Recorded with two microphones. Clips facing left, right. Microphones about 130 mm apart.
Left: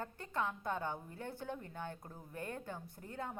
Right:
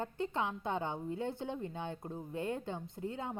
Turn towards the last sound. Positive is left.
turn(degrees=-20)  # may be behind; listen again after turning